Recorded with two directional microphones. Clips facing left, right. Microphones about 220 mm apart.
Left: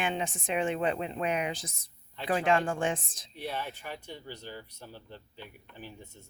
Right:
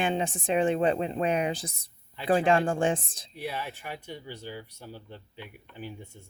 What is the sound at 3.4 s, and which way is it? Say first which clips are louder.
Speech: right 2 dB; 10° right (ahead or behind).